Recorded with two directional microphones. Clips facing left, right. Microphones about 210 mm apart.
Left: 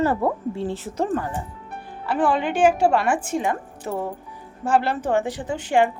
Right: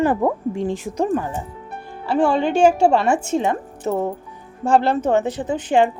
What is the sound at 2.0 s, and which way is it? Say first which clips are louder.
A woman's voice: right 4 dB; 25° right (ahead or behind).